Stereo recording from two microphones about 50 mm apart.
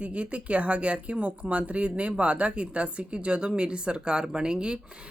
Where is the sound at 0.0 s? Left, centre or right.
Right.